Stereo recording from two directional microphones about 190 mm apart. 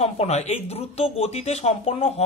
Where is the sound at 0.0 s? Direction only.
35° left (ahead or behind).